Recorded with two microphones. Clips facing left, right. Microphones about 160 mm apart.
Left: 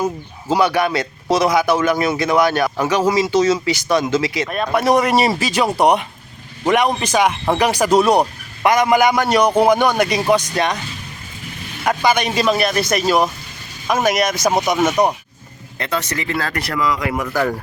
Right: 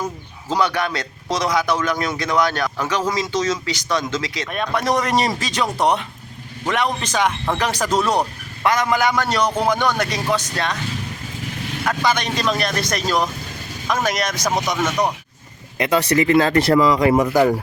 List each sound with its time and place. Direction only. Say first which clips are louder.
0.0 s speech: left 6 dB; 10° left (ahead or behind)
11.9 s speech: left 4 dB; 10° left (ahead or behind)
14.8 s speech: left 4 dB; 30° left (ahead or behind)
15.8 s speech: right 6 dB; 15° right (ahead or behind)